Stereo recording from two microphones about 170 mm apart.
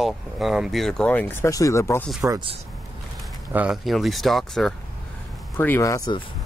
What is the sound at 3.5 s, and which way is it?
Speech, 5° right (ahead or behind).